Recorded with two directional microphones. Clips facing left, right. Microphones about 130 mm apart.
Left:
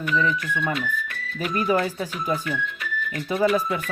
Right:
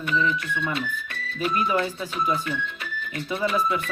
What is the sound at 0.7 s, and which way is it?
Speech, 25° right (ahead or behind).